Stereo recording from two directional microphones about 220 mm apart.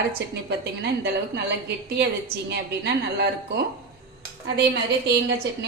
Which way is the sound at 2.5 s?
50° right (ahead or behind).